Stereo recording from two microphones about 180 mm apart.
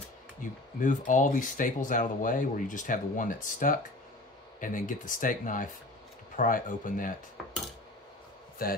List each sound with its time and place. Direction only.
0.4 s speech: 45° left (ahead or behind)
8.6 s speech: 55° left (ahead or behind)